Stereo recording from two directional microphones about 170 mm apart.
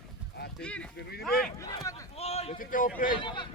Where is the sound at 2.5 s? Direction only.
50° left (ahead or behind).